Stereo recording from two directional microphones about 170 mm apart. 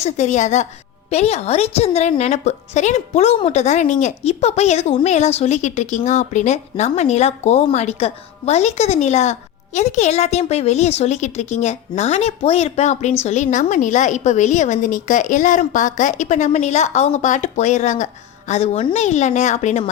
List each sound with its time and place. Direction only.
0.0 s a woman's voice: 45° left (ahead or behind)